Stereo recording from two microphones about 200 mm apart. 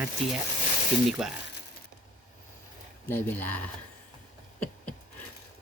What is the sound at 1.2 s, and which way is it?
Speech, centre (ahead or behind).